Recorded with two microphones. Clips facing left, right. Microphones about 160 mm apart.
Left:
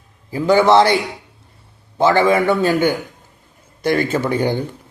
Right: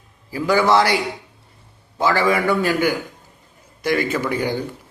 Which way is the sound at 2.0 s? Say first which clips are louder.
Left 4 dB; 25° left (ahead or behind).